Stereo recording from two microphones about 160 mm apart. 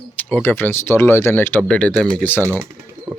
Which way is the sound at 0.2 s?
10° left (ahead or behind).